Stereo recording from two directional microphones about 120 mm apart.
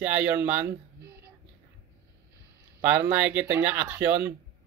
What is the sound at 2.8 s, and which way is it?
Speech, 15° right (ahead or behind).